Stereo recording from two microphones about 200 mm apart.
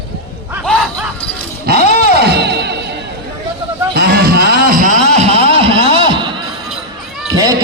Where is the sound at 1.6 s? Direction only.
50° right (ahead or behind); by 6.4 s 25° right (ahead or behind).